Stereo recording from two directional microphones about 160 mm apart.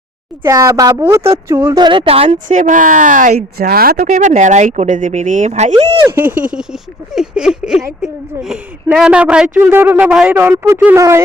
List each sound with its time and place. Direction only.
0.4 s a woman's voice: 20° right (ahead or behind); by 2.4 s 35° right (ahead or behind)
2.5 s speech: 50° right (ahead or behind)
6.1 s speech: 10° right (ahead or behind)